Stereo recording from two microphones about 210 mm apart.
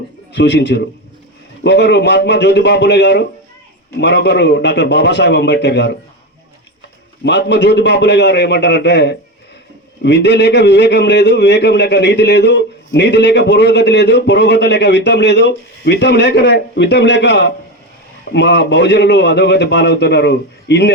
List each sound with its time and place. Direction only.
0.3 s a man's voice: 55° left (ahead or behind)
7.3 s a man's voice: 55° left (ahead or behind)